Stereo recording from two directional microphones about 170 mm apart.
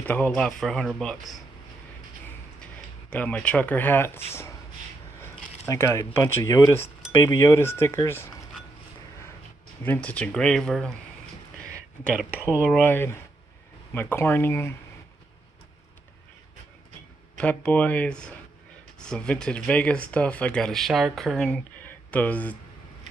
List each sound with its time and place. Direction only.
0.0 s speech: 10° left (ahead or behind)
2.6 s speech: 10° left (ahead or behind)
5.7 s speech: 20° left (ahead or behind)
10.0 s speech: 10° left (ahead or behind)
12.0 s speech: 5° right (ahead or behind)
12.8 s speech: 10° left (ahead or behind)
17.4 s speech: 10° left (ahead or behind)